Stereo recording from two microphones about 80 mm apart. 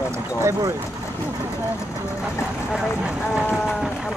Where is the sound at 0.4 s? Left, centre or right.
Right.